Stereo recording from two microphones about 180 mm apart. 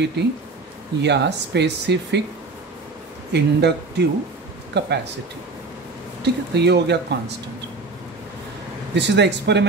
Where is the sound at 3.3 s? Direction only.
70° right (ahead or behind).